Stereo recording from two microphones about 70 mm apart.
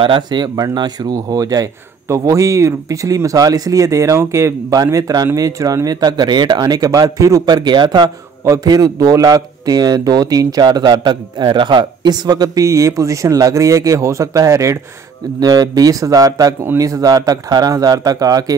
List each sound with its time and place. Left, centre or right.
0.3 s a man's voice: right
2.0 s speech: right
4.9 s a man's voice: right
5.9 s a man's voice: right
7.4 s a man's voice: right
8.5 s a man's voice: right
12.6 s speech: right
15.4 s a man's voice: right